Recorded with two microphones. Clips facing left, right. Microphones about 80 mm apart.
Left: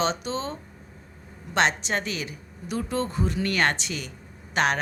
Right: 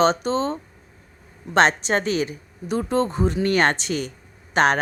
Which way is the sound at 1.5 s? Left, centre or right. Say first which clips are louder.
Right 6 dB; right.